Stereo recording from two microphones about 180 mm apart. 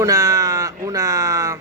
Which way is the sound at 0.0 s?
20° right (ahead or behind).